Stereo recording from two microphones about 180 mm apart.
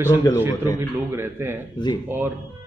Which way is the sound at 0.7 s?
15° right (ahead or behind).